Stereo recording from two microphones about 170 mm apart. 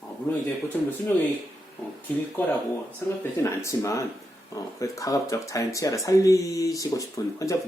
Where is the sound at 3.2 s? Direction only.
15° left (ahead or behind).